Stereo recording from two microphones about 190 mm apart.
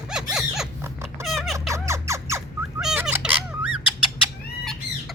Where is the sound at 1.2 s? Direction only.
Centre (ahead or behind).